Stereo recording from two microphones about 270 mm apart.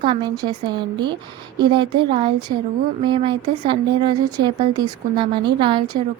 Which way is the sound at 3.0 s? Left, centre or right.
Centre.